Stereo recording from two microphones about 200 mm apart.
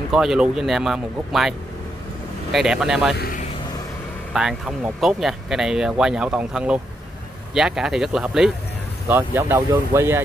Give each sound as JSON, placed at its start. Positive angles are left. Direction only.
{"t": 0.1, "sound": "speech", "side_deg": 0}
{"t": 2.5, "sound": "speech", "side_deg": -5}
{"t": 3.2, "sound": "vehicle", "side_deg": 45}
{"t": 4.3, "sound": "speech", "side_deg": 0}